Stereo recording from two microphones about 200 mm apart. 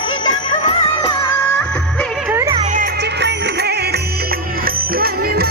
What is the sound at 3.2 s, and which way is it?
Music, 55° right (ahead or behind).